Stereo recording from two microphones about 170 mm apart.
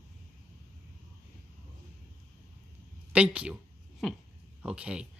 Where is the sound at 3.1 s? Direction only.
5° right (ahead or behind).